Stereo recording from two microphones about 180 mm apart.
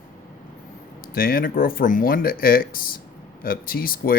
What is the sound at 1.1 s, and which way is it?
Speech, 55° left (ahead or behind).